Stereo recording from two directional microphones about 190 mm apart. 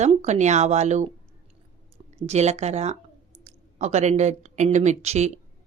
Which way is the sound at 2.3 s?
35° right (ahead or behind).